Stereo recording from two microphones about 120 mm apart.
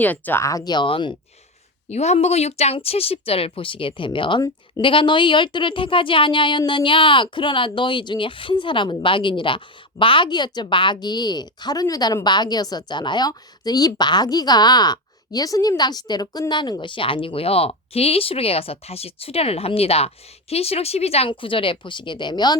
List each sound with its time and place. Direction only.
0.0 s speech: 15° left (ahead or behind)
0.4 s speech: 30° left (ahead or behind)
1.9 s a woman's voice: 65° left (ahead or behind); by 22.5 s 35° left (ahead or behind)